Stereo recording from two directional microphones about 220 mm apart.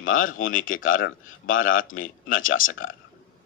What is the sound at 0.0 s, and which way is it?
A man's voice, 65° left (ahead or behind).